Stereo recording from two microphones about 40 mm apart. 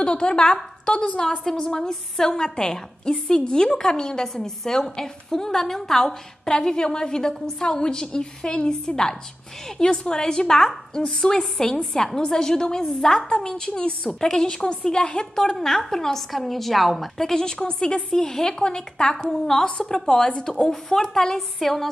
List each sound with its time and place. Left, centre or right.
0.0 s a woman's voice: left
1.4 s a woman's voice: centre
19.6 s a woman's voice: left; by 21.9 s centre